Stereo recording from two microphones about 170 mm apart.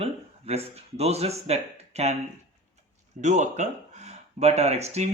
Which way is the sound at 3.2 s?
45° right (ahead or behind).